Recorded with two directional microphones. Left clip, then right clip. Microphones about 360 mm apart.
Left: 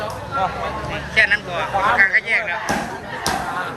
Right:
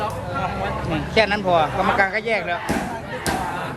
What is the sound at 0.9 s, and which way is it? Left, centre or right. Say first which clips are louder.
A man's voice: left 3 dB; centre.